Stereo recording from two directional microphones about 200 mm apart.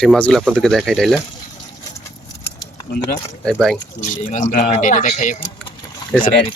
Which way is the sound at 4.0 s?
40° left (ahead or behind).